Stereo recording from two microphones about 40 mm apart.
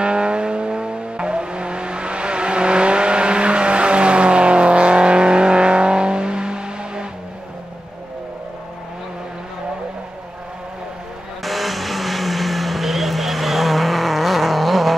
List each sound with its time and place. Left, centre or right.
0.0 s vehicle: right
11.4 s vehicle: centre